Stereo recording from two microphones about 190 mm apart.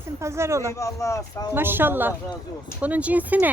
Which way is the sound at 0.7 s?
15° left (ahead or behind).